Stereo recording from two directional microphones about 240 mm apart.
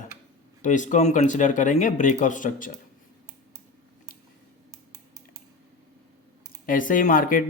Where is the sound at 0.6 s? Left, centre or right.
Left.